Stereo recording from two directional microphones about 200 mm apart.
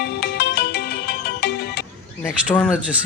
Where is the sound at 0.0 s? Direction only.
55° left (ahead or behind).